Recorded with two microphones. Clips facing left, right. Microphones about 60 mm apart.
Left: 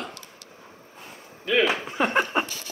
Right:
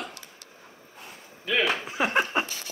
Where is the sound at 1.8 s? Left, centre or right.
Centre.